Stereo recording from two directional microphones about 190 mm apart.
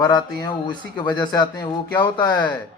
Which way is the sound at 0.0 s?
20° left (ahead or behind).